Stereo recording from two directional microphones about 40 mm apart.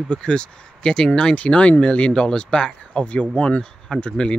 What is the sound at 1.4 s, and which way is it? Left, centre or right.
Speech, left.